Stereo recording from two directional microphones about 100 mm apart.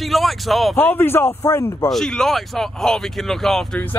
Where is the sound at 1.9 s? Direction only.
5° left (ahead or behind).